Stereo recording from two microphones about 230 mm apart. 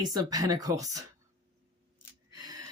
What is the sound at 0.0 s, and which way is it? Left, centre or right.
Speech, centre.